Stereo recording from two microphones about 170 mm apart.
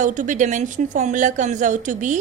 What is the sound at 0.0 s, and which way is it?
A woman's voice, 50° right (ahead or behind).